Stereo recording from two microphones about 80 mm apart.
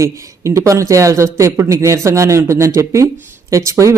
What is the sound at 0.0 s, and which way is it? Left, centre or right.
Speech, right.